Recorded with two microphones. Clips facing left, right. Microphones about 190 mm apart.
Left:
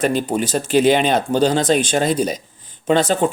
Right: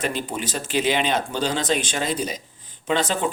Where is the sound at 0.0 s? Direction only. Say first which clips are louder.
Left 8 dB; 45° left (ahead or behind).